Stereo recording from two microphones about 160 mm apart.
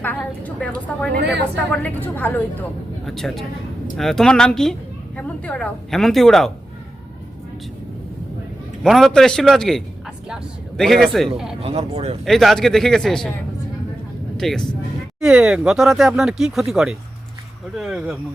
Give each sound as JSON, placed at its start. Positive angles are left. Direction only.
{"t": 0.0, "sound": "a woman's voice", "side_deg": 10}
{"t": 8.8, "sound": "a woman's voice", "side_deg": 0}
{"t": 11.6, "sound": "speech", "side_deg": -40}
{"t": 12.2, "sound": "a woman's voice", "side_deg": 0}
{"t": 14.3, "sound": "a woman's voice", "side_deg": 5}